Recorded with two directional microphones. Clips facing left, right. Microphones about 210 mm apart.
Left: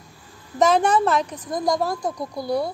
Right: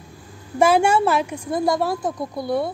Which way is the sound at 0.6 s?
10° right (ahead or behind).